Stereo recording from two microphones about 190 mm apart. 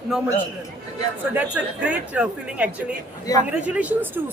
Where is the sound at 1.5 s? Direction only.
5° right (ahead or behind).